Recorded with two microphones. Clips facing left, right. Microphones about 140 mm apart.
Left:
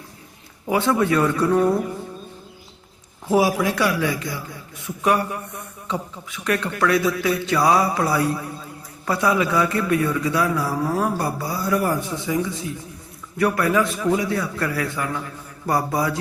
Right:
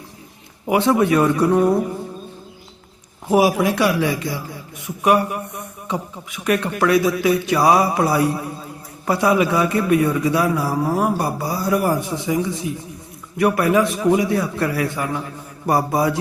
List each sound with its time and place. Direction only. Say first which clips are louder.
0.7 s a man's voice: right 3 dB; 20° right (ahead or behind)
3.2 s a man's voice: right 3 dB; 20° right (ahead or behind)